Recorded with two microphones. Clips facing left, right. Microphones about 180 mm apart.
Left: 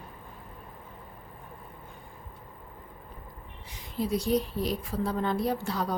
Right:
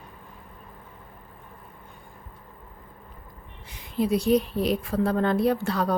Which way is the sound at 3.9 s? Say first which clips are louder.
Right 5 dB; 65° right (ahead or behind).